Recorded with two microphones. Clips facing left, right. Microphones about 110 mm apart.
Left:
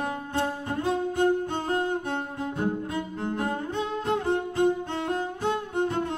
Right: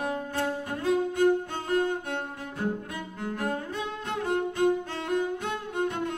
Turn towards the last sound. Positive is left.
turn(degrees=30)  # may be behind; listen again after turning